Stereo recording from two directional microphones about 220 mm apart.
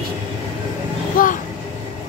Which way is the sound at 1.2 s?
40° left (ahead or behind).